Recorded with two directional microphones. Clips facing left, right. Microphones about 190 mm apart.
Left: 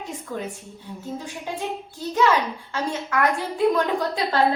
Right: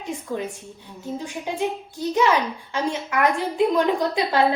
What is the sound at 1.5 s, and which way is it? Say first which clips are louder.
A child's voice: right 4 dB; 20° right (ahead or behind).